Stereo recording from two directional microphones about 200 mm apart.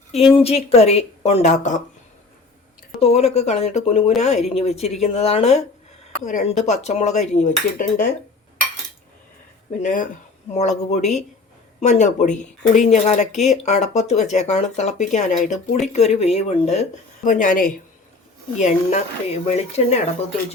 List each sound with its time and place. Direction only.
0.3 s speech: 30° left (ahead or behind)
3.0 s speech: 30° left (ahead or behind)
9.8 s speech: 45° left (ahead or behind)